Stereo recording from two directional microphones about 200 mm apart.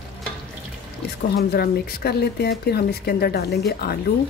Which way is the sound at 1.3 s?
50° left (ahead or behind).